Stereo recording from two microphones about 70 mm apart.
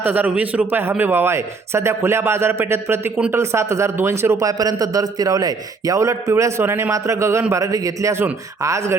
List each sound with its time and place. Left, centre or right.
0.0 s a man's voice: right
7.5 s a man's voice: right